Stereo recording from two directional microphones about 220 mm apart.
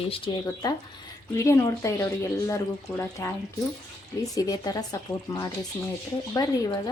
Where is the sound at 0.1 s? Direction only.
20° left (ahead or behind).